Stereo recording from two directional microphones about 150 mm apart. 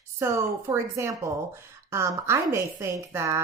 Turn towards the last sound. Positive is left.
turn(degrees=-15)  # may be behind; listen again after turning